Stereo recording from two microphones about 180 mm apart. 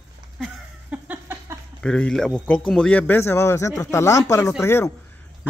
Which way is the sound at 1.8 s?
5° left (ahead or behind).